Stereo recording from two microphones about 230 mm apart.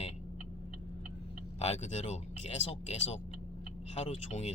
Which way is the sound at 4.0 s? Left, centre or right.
Left.